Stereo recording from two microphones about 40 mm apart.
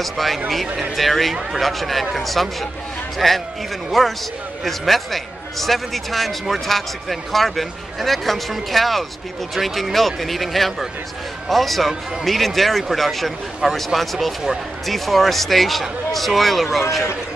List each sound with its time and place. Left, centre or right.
0.0 s a man's voice: centre